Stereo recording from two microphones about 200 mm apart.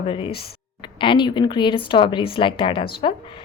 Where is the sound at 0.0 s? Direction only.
25° left (ahead or behind).